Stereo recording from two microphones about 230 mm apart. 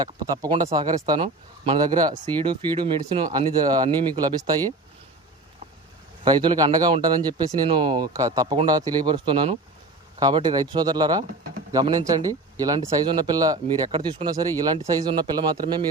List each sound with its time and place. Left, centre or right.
0.0 s speech: centre
6.2 s speech: centre